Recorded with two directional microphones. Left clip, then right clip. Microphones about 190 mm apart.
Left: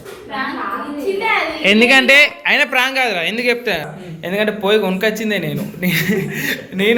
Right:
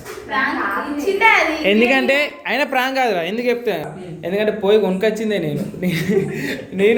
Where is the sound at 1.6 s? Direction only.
5° left (ahead or behind).